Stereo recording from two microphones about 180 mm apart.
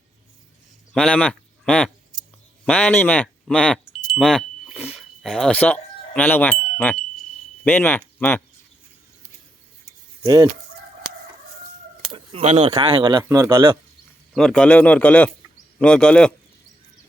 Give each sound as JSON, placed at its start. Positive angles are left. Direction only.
{"t": 0.9, "sound": "a sound", "side_deg": 5}
{"t": 2.6, "sound": "speech", "side_deg": 5}
{"t": 10.2, "sound": "speech", "side_deg": -20}
{"t": 12.1, "sound": "a sound", "side_deg": -35}
{"t": 12.8, "sound": "speech", "side_deg": -25}
{"t": 14.3, "sound": "a man's voice", "side_deg": 5}